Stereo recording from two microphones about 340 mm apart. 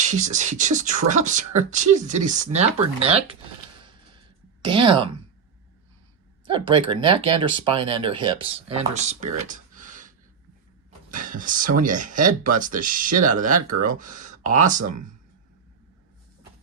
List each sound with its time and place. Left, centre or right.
0.0 s speech: right
4.6 s speech: centre
6.4 s speech: centre